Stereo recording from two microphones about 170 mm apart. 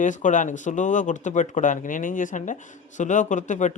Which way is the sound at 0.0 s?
45° left (ahead or behind).